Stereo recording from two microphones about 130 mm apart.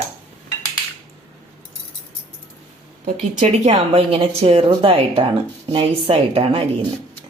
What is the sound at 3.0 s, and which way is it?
A woman's voice, 65° right (ahead or behind).